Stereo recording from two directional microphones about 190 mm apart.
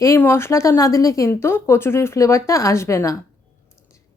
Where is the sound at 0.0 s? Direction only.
15° left (ahead or behind).